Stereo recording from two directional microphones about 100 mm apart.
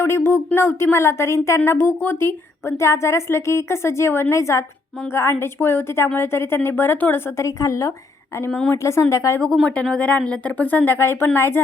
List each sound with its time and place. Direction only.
0.0 s speech: 25° left (ahead or behind)
8.4 s speech: 10° left (ahead or behind)
8.7 s speech: 30° left (ahead or behind)
9.6 s speech: 10° left (ahead or behind)